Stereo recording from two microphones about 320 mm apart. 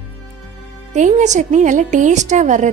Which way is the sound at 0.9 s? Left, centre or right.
Right.